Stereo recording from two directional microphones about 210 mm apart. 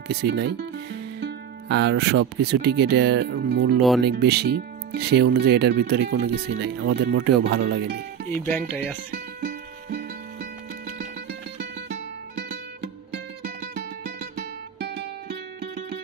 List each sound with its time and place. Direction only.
0.1 s speech: 50° right (ahead or behind)
8.5 s speech: 10° left (ahead or behind)
9.1 s music: 40° right (ahead or behind)
12.4 s music: 55° right (ahead or behind)